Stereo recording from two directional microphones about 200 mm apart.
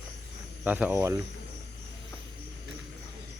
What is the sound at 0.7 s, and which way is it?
Speech, 10° right (ahead or behind).